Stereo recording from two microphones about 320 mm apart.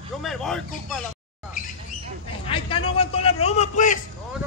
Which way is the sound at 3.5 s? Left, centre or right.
Left.